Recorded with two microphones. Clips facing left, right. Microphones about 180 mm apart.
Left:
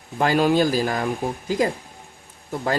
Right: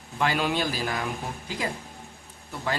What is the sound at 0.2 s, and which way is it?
Speech, 40° left (ahead or behind).